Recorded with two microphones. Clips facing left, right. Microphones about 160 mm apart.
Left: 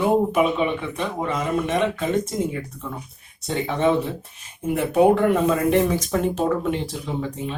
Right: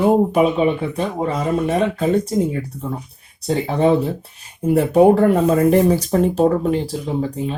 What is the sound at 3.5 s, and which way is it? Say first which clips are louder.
Speech: right 5 dB; 35° right (ahead or behind).